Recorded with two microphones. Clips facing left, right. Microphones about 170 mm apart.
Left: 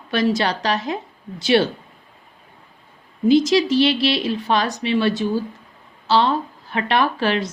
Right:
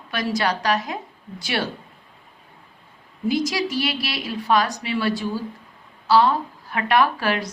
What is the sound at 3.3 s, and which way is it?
A woman's voice, 25° left (ahead or behind).